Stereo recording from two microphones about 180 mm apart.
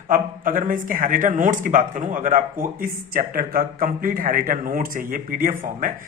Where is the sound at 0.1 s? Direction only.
50° right (ahead or behind).